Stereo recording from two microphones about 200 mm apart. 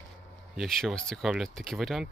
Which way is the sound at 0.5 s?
Centre (ahead or behind).